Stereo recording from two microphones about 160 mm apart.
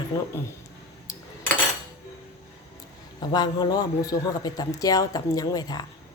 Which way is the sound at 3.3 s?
25° left (ahead or behind).